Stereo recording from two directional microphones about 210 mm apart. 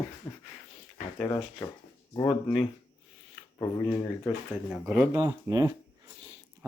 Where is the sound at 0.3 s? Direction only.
15° left (ahead or behind).